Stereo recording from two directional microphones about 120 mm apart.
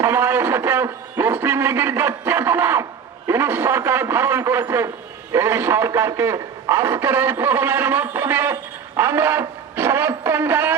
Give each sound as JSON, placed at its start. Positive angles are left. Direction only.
{"t": 0.0, "sound": "a man's voice", "side_deg": -20}